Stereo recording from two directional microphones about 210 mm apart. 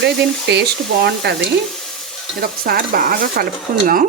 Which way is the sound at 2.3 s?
45° right (ahead or behind).